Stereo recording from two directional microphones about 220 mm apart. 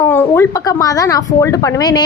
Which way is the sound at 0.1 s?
10° left (ahead or behind).